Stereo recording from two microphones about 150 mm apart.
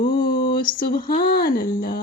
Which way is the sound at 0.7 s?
75° left (ahead or behind).